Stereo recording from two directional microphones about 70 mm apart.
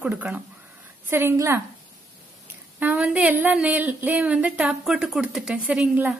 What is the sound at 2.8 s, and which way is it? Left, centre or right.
A woman's voice, right.